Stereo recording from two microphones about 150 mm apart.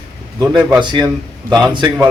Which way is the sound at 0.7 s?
30° right (ahead or behind).